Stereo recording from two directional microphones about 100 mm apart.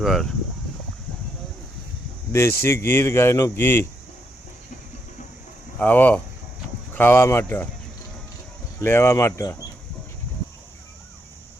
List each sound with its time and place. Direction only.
0.0 s speech: centre (ahead or behind)
2.3 s speech: 25° left (ahead or behind)
5.8 s speech: 15° left (ahead or behind)
8.8 s speech: 25° left (ahead or behind)